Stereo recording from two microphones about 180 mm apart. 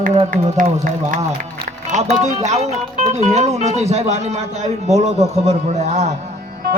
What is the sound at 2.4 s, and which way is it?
A man's voice, 40° right (ahead or behind).